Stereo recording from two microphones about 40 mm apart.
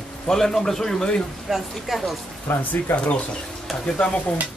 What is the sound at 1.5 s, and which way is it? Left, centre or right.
Speech, centre.